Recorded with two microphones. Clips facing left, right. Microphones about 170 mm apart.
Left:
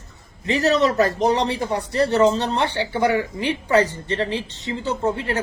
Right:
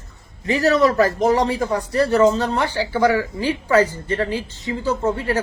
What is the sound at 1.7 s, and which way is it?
A woman's voice, 25° left (ahead or behind).